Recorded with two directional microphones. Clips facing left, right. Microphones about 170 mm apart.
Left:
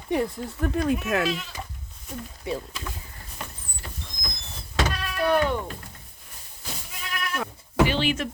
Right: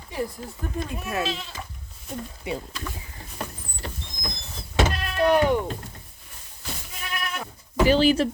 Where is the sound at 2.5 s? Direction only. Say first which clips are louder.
Left 1 dB; 15° right (ahead or behind).